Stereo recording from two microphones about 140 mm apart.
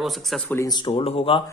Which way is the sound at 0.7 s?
35° left (ahead or behind).